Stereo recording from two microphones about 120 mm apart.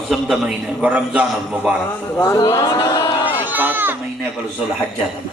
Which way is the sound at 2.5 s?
30° left (ahead or behind).